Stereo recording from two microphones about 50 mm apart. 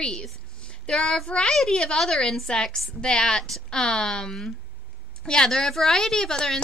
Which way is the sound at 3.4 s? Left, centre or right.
Centre.